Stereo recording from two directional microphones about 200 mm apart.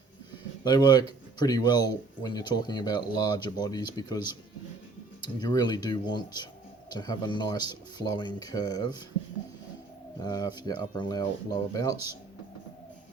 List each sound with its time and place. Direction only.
0.6 s speech: 20° left (ahead or behind)
10.2 s speech: 20° left (ahead or behind)